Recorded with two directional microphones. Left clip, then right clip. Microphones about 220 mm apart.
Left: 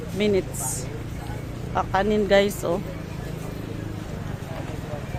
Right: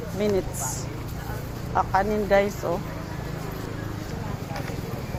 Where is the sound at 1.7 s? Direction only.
25° left (ahead or behind).